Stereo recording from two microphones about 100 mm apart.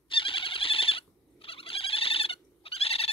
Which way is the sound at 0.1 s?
60° left (ahead or behind).